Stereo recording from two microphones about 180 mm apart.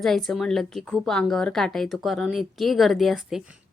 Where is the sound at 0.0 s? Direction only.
Centre (ahead or behind).